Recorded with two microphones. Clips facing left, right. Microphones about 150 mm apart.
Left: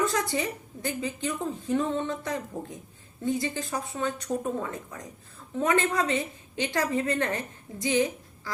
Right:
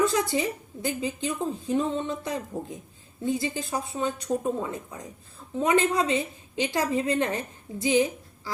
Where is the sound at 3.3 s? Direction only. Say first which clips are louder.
Right 1 dB; 10° right (ahead or behind).